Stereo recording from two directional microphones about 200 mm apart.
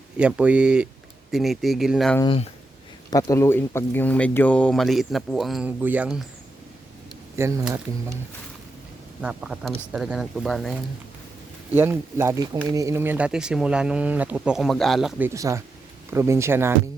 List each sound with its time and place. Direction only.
0.2 s speech: 5° right (ahead or behind)
2.2 s speech: 25° left (ahead or behind)
3.1 s speech: 15° left (ahead or behind); by 6.2 s 5° right (ahead or behind)
7.3 s speech: 15° right (ahead or behind)
9.2 s speech: 5° right (ahead or behind)
11.7 s speech: 10° right (ahead or behind)
15.3 s speech: 15° right (ahead or behind)